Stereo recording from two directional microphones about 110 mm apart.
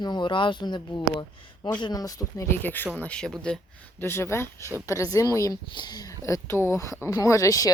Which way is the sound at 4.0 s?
25° left (ahead or behind).